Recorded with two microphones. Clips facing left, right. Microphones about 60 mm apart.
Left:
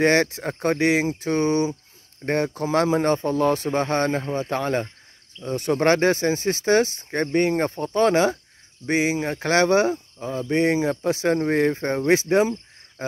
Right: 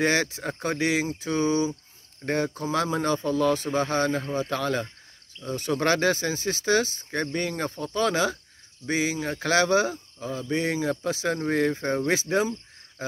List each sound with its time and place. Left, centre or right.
0.0 s speech: left
9.1 s speech: left
10.1 s speech: left
10.5 s speech: left